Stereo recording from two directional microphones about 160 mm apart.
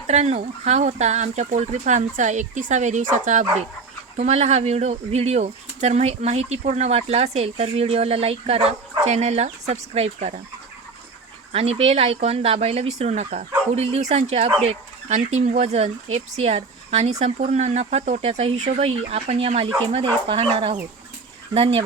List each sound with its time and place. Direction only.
0.1 s speech: 45° right (ahead or behind)
4.2 s speech: 45° right (ahead or behind)
11.5 s speech: 40° right (ahead or behind)